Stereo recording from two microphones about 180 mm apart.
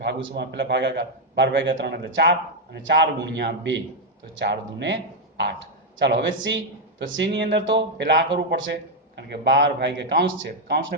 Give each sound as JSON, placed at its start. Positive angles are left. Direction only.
{"t": 0.0, "sound": "a man's voice", "side_deg": -75}
{"t": 6.0, "sound": "a man's voice", "side_deg": -80}